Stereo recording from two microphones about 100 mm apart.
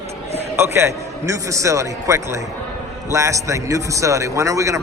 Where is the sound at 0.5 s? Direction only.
25° right (ahead or behind).